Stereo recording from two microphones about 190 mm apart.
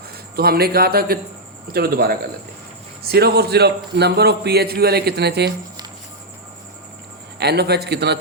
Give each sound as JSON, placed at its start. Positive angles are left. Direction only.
{"t": 0.3, "sound": "a man's voice", "side_deg": -55}
{"t": 7.3, "sound": "a man's voice", "side_deg": -60}